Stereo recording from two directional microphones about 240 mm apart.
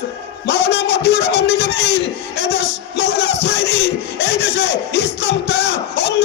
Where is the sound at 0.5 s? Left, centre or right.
Left.